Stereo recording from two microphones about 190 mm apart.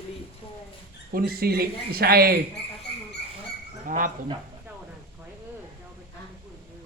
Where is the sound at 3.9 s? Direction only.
45° right (ahead or behind).